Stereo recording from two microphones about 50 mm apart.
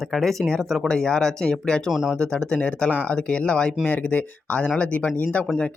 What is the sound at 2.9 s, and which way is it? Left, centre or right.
Speech, left.